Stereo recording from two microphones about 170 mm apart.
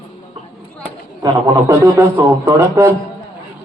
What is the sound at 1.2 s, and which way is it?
A man's voice, 20° right (ahead or behind).